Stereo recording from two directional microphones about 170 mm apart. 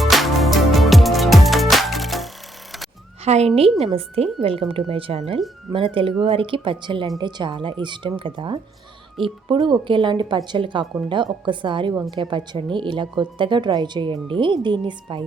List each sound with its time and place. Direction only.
0.0 s music: centre (ahead or behind)
3.2 s speech: 40° right (ahead or behind)